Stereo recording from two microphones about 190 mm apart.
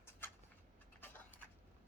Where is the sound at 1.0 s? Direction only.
10° left (ahead or behind).